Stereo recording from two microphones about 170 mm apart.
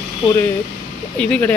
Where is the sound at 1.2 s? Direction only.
10° left (ahead or behind).